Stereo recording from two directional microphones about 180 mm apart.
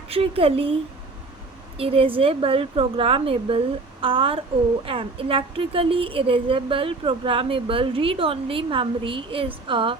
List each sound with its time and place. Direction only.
0.1 s speech: 30° right (ahead or behind)
1.8 s a woman's voice: 30° right (ahead or behind)